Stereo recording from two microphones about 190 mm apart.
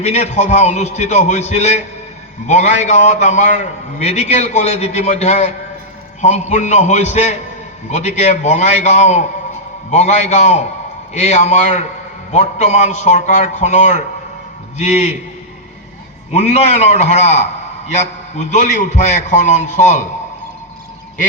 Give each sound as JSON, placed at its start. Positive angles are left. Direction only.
{"t": 0.0, "sound": "a man's voice", "side_deg": 35}
{"t": 16.3, "sound": "a man's voice", "side_deg": 35}